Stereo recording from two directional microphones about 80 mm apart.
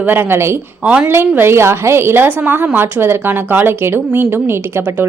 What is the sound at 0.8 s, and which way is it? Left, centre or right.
Speech, centre.